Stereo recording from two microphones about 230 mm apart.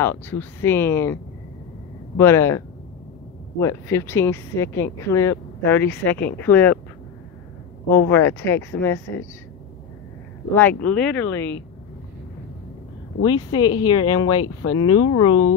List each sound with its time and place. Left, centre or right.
0.0 s speech: centre
8.1 s speech: centre
10.5 s speech: centre
13.2 s speech: left